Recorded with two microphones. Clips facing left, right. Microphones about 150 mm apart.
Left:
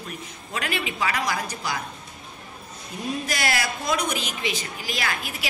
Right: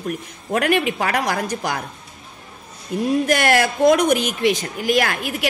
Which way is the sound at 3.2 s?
55° right (ahead or behind).